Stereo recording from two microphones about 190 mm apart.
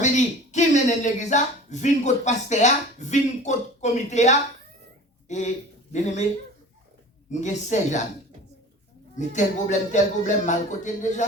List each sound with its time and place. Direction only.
0.0 s speech: 40° left (ahead or behind)
7.3 s speech: 40° left (ahead or behind)
9.1 s speech: 40° left (ahead or behind)